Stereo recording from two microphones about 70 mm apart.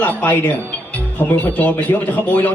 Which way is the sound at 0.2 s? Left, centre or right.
Left.